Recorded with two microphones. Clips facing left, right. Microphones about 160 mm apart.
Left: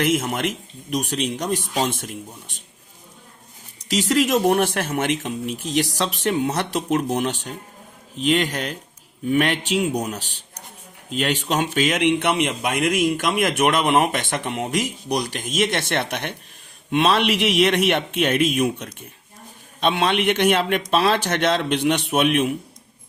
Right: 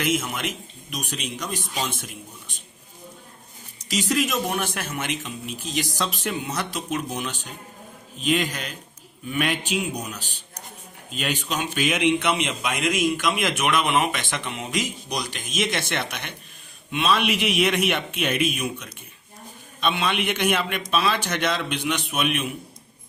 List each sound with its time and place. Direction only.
0.3 s speech: 65° left (ahead or behind)
3.8 s speech: 70° left (ahead or behind)
11.1 s speech: 75° left (ahead or behind)
13.7 s speech: 50° left (ahead or behind); by 18.7 s 75° left (ahead or behind)
19.8 s speech: 70° left (ahead or behind)